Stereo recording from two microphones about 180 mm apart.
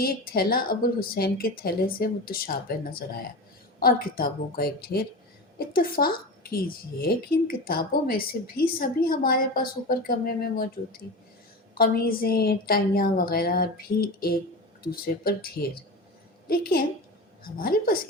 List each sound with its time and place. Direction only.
0.0 s a woman's voice: 55° left (ahead or behind)